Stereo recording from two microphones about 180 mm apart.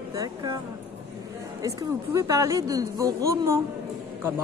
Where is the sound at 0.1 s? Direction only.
20° right (ahead or behind).